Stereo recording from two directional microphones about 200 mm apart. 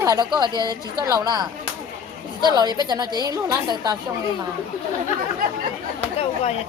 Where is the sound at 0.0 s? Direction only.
20° right (ahead or behind).